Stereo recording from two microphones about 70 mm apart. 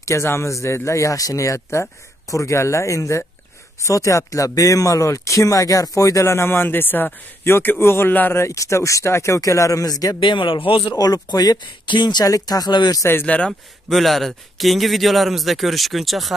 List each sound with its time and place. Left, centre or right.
0.0 s speech: left
8.1 s speech: left
8.4 s speech: left
10.9 s speech: left
12.3 s speech: left
13.2 s speech: left
13.5 s speech: centre